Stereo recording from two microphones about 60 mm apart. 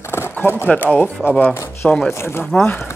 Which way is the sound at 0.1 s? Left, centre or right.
Left.